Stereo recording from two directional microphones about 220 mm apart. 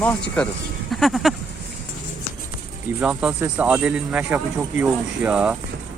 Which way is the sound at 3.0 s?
5° right (ahead or behind).